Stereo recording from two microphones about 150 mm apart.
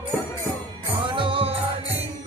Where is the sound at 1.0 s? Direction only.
35° right (ahead or behind).